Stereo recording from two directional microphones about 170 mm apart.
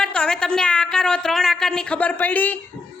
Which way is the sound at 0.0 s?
5° left (ahead or behind).